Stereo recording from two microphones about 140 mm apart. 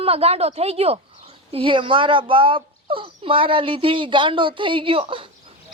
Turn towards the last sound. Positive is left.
turn(degrees=-40)  # may be behind; listen again after turning